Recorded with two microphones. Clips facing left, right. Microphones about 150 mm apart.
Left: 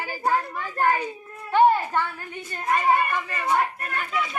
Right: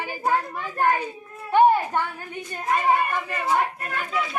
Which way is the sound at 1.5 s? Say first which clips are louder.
Right 1 dB; 15° right (ahead or behind).